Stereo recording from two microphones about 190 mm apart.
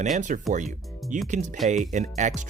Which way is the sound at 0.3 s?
45° right (ahead or behind).